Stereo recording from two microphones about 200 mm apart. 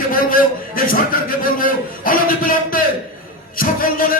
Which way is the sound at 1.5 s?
45° left (ahead or behind).